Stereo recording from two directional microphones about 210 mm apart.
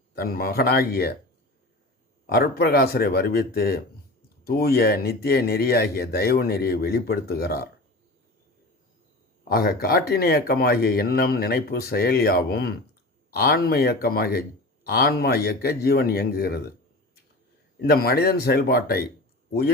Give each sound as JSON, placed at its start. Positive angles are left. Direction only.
{"t": 0.1, "sound": "speech", "side_deg": 45}
{"t": 2.2, "sound": "speech", "side_deg": 50}
{"t": 9.4, "sound": "speech", "side_deg": 45}
{"t": 17.7, "sound": "speech", "side_deg": 45}